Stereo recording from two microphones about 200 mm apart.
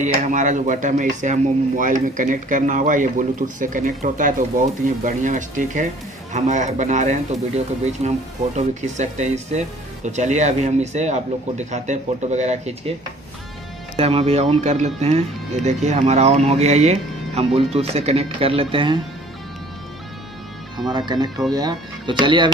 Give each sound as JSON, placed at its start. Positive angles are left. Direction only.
{"t": 0.0, "sound": "speech", "side_deg": -40}
{"t": 13.9, "sound": "speech", "side_deg": -30}
{"t": 20.9, "sound": "speech", "side_deg": -20}